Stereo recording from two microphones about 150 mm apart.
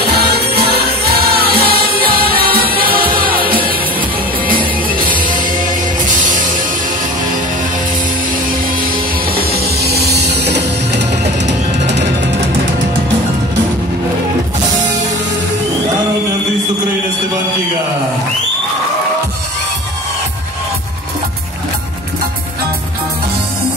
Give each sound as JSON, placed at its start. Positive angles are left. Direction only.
{"t": 0.0, "sound": "music", "side_deg": -90}
{"t": 9.5, "sound": "music", "side_deg": -90}